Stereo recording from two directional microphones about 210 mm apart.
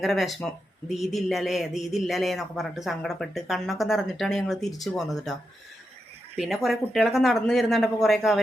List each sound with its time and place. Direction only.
0.0 s speech: centre (ahead or behind)